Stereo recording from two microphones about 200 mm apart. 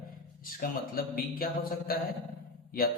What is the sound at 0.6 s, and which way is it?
A man's voice, 45° left (ahead or behind).